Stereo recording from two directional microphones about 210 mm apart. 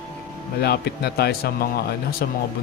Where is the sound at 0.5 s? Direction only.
50° left (ahead or behind).